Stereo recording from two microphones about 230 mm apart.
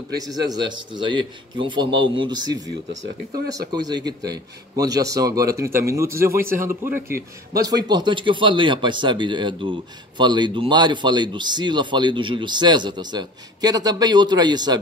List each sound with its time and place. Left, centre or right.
0.5 s speech: centre
3.7 s speech: centre